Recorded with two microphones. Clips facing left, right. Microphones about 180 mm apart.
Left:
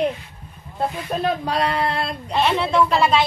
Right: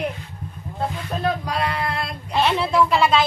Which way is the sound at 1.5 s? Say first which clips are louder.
Left 3 dB; 35° left (ahead or behind).